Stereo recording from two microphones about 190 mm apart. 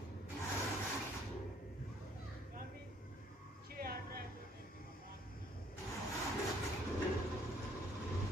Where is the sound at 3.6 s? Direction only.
50° right (ahead or behind).